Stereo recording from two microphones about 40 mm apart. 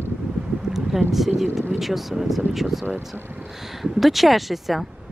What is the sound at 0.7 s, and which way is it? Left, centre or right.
Speech, centre.